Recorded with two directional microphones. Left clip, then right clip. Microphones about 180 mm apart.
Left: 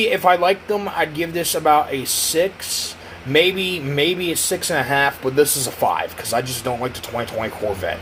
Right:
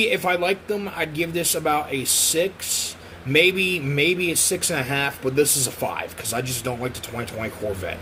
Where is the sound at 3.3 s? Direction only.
40° right (ahead or behind).